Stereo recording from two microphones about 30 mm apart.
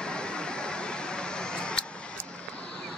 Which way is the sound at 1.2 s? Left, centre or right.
Left.